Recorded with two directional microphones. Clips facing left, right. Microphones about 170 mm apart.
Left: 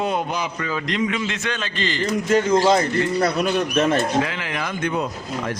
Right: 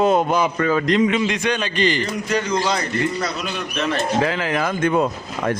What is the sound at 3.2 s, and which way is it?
Speech, 55° left (ahead or behind).